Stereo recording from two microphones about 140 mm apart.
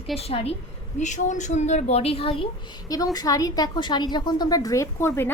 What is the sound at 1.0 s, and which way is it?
A woman's voice, 60° left (ahead or behind).